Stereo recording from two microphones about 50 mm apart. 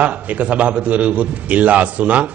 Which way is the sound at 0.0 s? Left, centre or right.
Right.